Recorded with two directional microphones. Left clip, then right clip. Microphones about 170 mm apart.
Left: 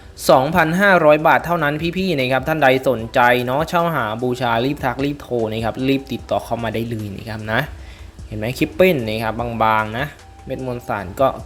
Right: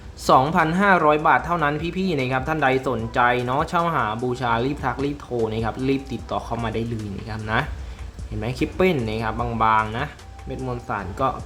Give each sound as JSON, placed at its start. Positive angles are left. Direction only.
{"t": 0.3, "sound": "speech", "side_deg": 20}